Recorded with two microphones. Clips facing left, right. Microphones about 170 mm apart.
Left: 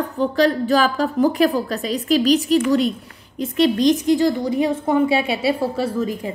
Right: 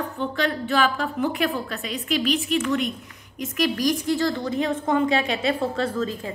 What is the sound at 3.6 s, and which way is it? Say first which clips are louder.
A woman's voice: left 7 dB; 25° left (ahead or behind).